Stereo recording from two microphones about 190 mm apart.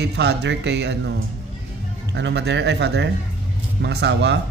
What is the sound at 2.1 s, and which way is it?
Speech, 65° right (ahead or behind).